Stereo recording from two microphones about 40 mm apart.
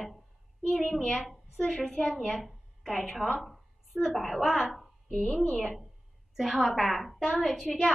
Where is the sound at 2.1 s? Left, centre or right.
Centre.